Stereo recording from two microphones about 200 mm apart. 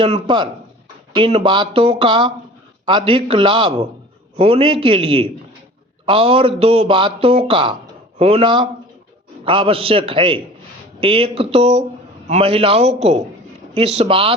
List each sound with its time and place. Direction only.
0.0 s a man's voice: 25° right (ahead or behind)